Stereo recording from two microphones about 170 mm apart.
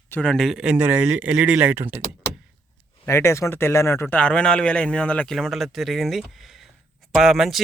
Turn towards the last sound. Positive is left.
turn(degrees=0)  # may be behind; listen again after turning